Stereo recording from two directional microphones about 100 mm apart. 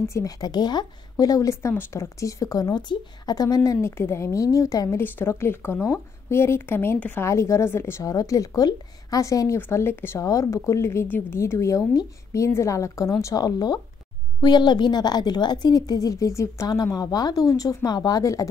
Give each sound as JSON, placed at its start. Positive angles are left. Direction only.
{"t": 0.1, "sound": "a woman's voice", "side_deg": 35}